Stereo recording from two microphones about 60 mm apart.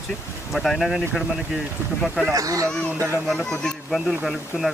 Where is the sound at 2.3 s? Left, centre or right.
Right.